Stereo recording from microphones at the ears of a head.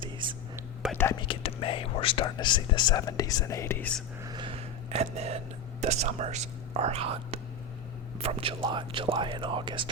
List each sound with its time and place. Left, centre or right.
0.9 s speech: left
4.4 s a sound: right
5.8 s speech: right